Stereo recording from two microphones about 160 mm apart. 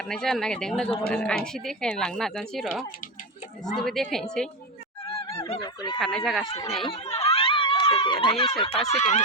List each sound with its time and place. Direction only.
0.0 s a woman's voice: 5° left (ahead or behind)
5.3 s speech: 40° left (ahead or behind)
5.5 s speech: 25° left (ahead or behind)
6.0 s speech: centre (ahead or behind)
6.4 s speech: 25° left (ahead or behind)
6.8 s a sound: 40° left (ahead or behind)
8.9 s speech: 45° left (ahead or behind)